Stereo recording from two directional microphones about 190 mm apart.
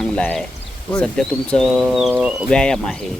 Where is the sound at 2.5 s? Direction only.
5° left (ahead or behind).